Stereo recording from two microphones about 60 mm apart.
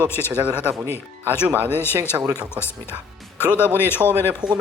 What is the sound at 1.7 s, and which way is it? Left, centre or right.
Speech, left.